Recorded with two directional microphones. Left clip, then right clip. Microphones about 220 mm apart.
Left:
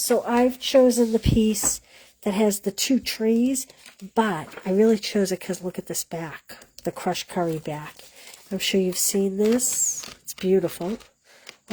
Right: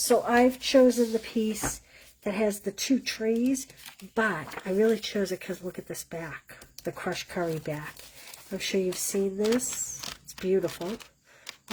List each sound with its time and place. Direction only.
0.1 s speech: 25° left (ahead or behind)
8.9 s speech: centre (ahead or behind)